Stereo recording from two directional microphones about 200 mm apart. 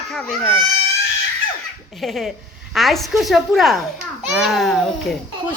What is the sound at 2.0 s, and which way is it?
A woman's voice, centre (ahead or behind).